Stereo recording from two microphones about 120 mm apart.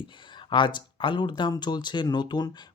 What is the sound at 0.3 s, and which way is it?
Speech, 40° left (ahead or behind).